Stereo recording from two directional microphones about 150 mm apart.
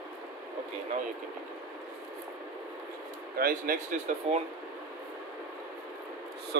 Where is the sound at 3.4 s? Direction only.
65° right (ahead or behind).